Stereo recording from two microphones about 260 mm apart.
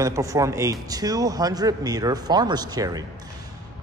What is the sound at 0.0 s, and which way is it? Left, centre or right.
A man's voice, centre.